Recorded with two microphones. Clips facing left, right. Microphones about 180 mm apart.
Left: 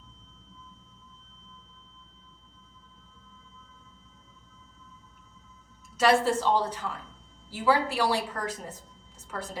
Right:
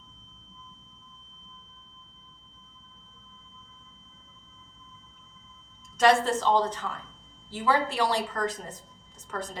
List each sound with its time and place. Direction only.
6.0 s a woman's voice: 10° left (ahead or behind)